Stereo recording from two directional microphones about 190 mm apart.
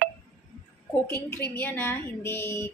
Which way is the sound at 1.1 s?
10° left (ahead or behind).